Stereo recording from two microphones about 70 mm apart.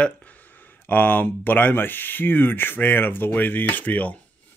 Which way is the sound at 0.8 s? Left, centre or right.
Left.